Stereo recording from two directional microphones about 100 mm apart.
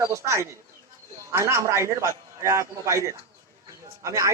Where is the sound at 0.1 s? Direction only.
30° right (ahead or behind).